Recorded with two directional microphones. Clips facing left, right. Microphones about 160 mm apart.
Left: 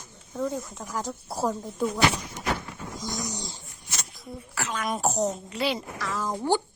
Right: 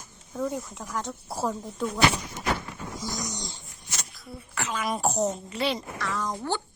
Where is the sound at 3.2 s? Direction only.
30° left (ahead or behind).